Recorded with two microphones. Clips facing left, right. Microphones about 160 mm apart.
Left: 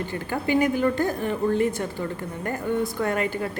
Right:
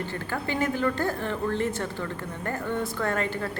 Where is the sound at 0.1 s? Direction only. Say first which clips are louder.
Left 6 dB; 15° left (ahead or behind).